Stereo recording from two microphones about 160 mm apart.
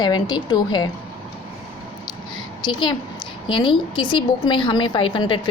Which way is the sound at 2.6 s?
30° left (ahead or behind).